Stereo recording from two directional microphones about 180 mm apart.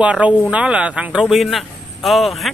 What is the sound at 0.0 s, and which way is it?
Speech, 5° right (ahead or behind).